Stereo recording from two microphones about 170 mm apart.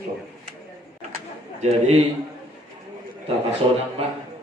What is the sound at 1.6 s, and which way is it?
Speech, 40° right (ahead or behind).